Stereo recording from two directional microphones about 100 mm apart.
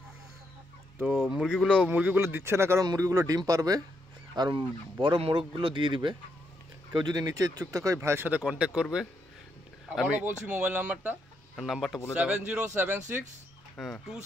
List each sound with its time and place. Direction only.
1.0 s speech: 5° right (ahead or behind)
1.9 s speech: 15° right (ahead or behind)
2.8 s speech: 35° right (ahead or behind)
8.3 s speech: 10° right (ahead or behind)
10.2 s speech: 20° right (ahead or behind)
11.5 s speech: centre (ahead or behind); by 13.2 s 20° right (ahead or behind)
13.7 s speech: 5° left (ahead or behind)